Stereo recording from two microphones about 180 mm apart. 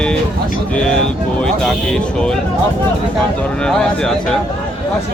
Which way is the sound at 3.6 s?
5° left (ahead or behind).